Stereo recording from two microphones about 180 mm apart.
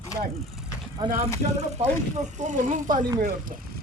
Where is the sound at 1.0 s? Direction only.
25° right (ahead or behind).